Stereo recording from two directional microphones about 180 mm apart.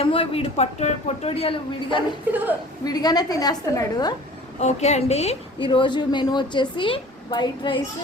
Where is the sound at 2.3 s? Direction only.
10° right (ahead or behind).